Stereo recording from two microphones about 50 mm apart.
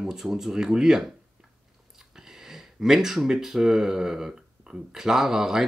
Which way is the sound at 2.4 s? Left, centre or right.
Centre.